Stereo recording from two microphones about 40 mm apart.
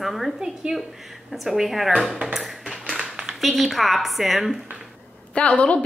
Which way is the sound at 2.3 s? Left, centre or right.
Centre.